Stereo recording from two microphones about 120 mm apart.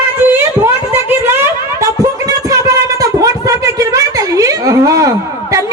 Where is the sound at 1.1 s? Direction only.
20° right (ahead or behind).